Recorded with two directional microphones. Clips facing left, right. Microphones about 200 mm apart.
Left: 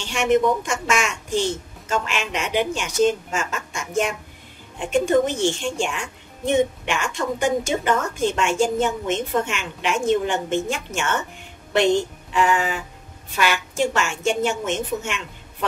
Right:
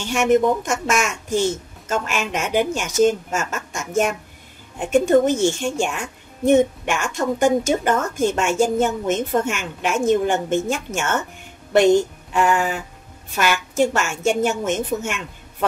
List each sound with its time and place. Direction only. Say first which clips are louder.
0.0 s a woman's voice: right 2 dB; 45° right (ahead or behind)